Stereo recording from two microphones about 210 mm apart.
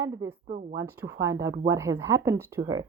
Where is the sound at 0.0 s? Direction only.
15° right (ahead or behind).